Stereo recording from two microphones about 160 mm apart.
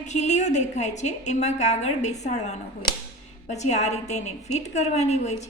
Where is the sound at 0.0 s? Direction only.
45° left (ahead or behind).